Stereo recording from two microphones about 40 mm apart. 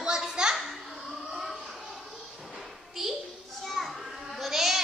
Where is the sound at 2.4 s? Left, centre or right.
Centre.